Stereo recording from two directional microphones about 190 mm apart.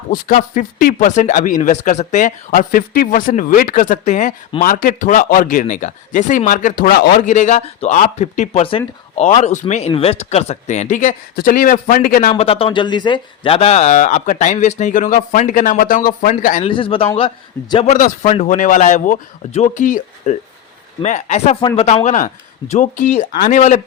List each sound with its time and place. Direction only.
0.1 s a man's voice: 45° left (ahead or behind)
12.3 s a man's voice: 30° left (ahead or behind)
16.6 s a man's voice: 25° left (ahead or behind)
17.9 s a man's voice: 40° left (ahead or behind)